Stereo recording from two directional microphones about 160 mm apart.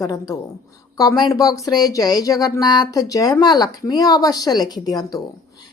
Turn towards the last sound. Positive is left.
turn(degrees=25)  # may be behind; listen again after turning